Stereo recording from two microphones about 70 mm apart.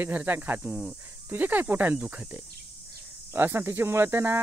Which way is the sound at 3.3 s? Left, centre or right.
Right.